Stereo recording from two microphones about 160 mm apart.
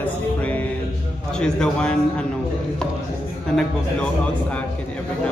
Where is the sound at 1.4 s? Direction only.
5° left (ahead or behind).